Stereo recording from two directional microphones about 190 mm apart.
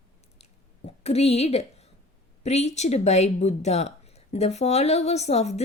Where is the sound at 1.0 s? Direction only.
35° left (ahead or behind).